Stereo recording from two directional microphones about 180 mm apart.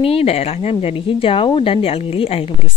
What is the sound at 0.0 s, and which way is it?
A woman's voice, 35° left (ahead or behind).